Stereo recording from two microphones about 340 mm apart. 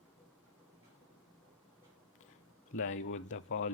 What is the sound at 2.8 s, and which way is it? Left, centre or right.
Speech, left.